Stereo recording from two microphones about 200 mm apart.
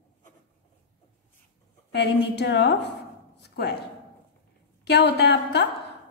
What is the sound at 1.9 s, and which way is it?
Speech, 55° left (ahead or behind).